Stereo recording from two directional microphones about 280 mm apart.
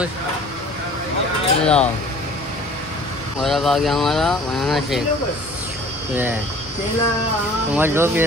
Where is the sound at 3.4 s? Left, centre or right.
Centre.